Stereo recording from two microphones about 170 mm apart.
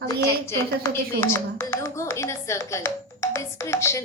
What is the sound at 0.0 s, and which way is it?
A woman's voice, 20° left (ahead or behind).